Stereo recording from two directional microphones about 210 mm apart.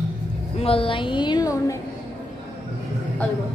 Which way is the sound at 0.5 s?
25° left (ahead or behind).